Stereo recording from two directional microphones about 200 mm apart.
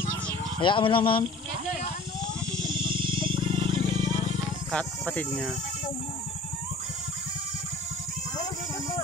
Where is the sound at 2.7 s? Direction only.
25° right (ahead or behind).